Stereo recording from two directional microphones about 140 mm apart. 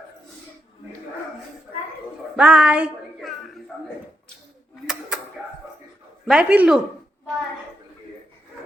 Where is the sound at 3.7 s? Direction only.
5° right (ahead or behind).